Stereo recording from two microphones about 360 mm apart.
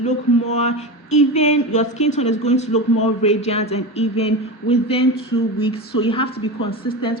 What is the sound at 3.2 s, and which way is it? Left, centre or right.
A woman's voice, centre.